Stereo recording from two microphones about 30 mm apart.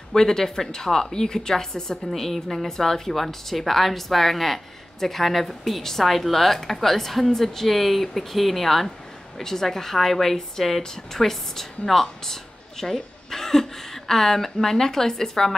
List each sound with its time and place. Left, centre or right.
0.1 s a woman's voice: centre